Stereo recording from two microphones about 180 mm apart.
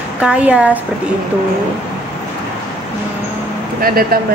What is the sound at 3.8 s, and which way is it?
Speech, 55° right (ahead or behind).